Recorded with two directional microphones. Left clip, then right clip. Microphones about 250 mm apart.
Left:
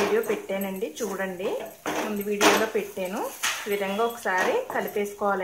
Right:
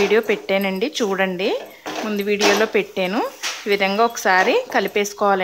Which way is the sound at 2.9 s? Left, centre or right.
Right.